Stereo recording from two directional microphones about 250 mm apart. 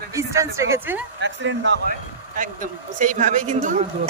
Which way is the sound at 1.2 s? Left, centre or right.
Right.